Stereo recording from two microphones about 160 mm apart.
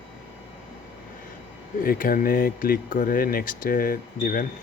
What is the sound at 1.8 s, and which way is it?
Speech, 65° left (ahead or behind).